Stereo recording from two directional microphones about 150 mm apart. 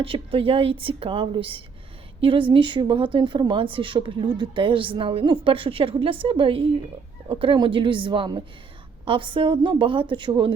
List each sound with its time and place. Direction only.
0.0 s a woman's voice: 35° right (ahead or behind)